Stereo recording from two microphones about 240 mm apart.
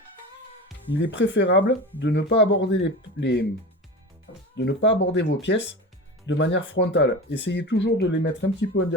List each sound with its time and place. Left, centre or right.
1.0 s speech: left
4.5 s speech: left